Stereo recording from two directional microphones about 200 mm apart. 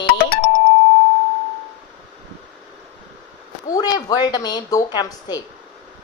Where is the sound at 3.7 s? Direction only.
20° left (ahead or behind).